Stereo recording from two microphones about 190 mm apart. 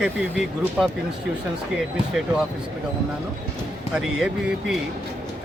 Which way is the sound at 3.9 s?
Centre (ahead or behind).